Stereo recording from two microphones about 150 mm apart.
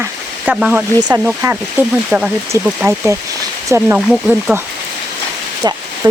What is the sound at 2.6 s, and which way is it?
Speech, 15° right (ahead or behind).